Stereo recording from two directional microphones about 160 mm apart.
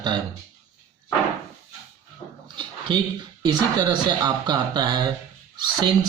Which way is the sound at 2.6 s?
30° right (ahead or behind).